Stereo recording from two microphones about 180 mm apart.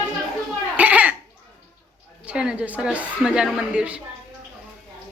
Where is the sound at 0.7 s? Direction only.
10° right (ahead or behind).